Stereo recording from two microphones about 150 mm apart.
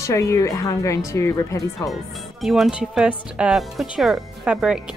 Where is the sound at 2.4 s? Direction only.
Centre (ahead or behind).